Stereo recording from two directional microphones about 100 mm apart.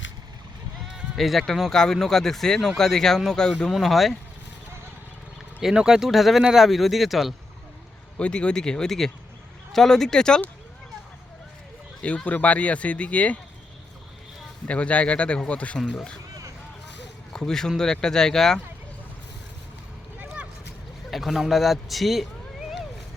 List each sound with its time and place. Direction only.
1.1 s speech: centre (ahead or behind)
5.5 s speech: 5° right (ahead or behind)
8.2 s speech: 10° left (ahead or behind)
12.0 s speech: 10° left (ahead or behind)
14.7 s speech: 15° left (ahead or behind)
17.3 s speech: 5° left (ahead or behind)
20.1 s a sound: 15° right (ahead or behind)
21.1 s speech: centre (ahead or behind)